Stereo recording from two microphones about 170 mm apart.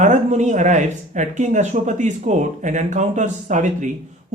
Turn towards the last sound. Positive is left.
turn(degrees=-45)  # may be behind; listen again after turning